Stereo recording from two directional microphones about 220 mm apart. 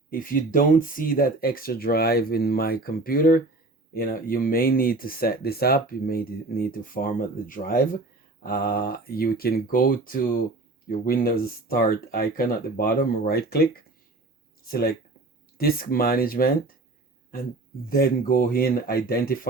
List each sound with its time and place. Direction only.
0.1 s speech: 40° left (ahead or behind)
17.8 s speech: 40° left (ahead or behind)